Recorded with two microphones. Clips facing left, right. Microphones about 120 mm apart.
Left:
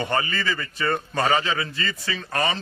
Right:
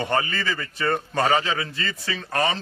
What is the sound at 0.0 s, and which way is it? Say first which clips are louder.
A man's voice: right 1 dB; 40° right (ahead or behind).